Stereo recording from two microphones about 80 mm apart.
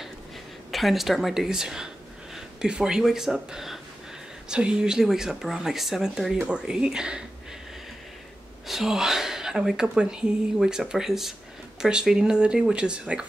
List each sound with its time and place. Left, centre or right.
0.7 s speech: centre
8.6 s speech: centre